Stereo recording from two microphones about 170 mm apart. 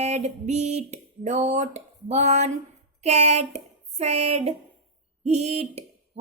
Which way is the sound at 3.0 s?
40° right (ahead or behind).